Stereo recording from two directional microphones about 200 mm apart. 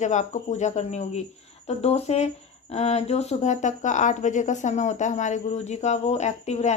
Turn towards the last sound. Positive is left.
turn(degrees=35)  # may be behind; listen again after turning